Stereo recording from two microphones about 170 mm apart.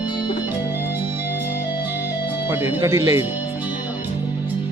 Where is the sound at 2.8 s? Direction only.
20° right (ahead or behind).